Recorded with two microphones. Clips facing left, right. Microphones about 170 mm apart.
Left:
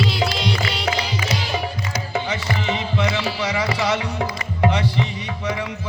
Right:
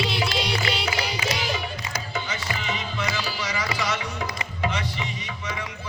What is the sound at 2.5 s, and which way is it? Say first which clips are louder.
Music: left 7 dB; 65° left (ahead or behind).